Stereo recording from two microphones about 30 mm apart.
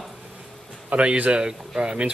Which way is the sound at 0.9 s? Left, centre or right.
Right.